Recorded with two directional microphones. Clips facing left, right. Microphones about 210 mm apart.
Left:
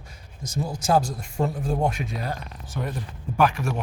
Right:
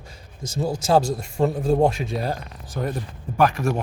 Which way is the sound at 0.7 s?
25° right (ahead or behind).